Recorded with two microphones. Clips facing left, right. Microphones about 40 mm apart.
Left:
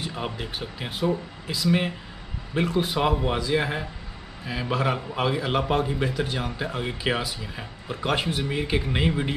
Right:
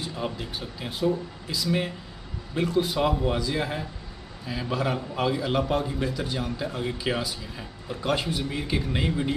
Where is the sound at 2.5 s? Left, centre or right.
Left.